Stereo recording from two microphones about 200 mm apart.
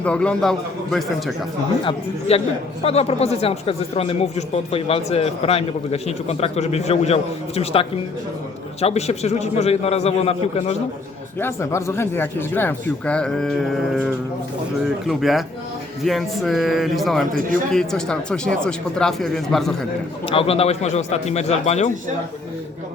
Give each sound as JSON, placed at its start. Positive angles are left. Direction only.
{"t": 0.0, "sound": "speech", "side_deg": 5}
{"t": 1.8, "sound": "speech", "side_deg": 25}
{"t": 11.3, "sound": "speech", "side_deg": 10}
{"t": 20.2, "sound": "speech", "side_deg": 30}